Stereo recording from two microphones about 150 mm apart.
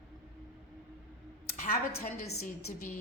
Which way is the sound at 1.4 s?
80° left.